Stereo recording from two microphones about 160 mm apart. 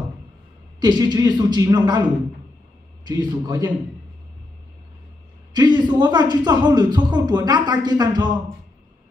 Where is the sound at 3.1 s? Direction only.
25° right (ahead or behind).